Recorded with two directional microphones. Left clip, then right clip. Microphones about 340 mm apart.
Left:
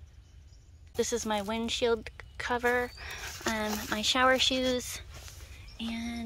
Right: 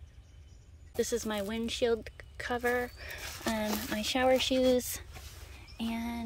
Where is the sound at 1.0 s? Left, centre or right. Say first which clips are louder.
Left 2 dB; centre.